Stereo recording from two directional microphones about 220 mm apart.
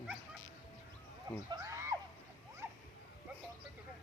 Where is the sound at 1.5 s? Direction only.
15° right (ahead or behind).